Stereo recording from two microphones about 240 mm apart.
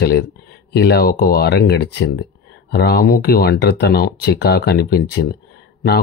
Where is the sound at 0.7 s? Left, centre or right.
Left.